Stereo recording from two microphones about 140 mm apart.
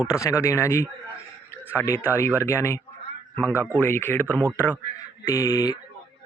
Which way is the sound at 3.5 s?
15° right (ahead or behind).